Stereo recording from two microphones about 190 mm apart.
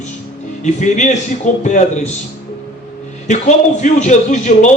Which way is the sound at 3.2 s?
40° left (ahead or behind).